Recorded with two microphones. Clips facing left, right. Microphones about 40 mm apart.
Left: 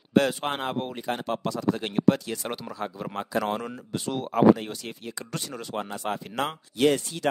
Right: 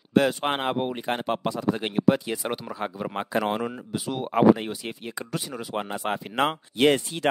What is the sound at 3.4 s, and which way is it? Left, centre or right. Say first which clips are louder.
Speech: right 2 dB; centre.